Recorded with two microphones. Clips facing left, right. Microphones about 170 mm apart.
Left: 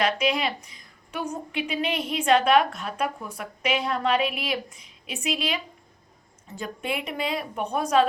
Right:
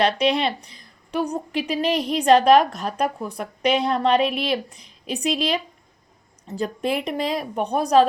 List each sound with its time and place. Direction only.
0.0 s a woman's voice: 35° right (ahead or behind)
6.6 s a woman's voice: 35° right (ahead or behind)